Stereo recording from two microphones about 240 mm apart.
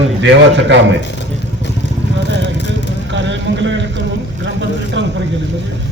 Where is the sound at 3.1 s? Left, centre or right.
Right.